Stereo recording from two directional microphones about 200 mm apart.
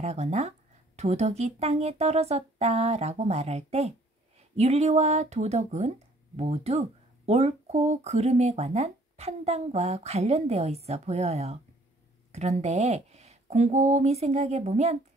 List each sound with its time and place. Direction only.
0.0 s speech: 35° right (ahead or behind)